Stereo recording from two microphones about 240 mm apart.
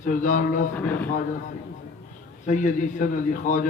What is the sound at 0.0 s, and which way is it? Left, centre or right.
Speech, left.